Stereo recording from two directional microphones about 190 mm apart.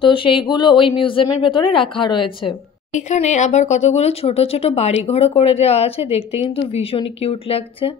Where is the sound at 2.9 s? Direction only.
35° left (ahead or behind).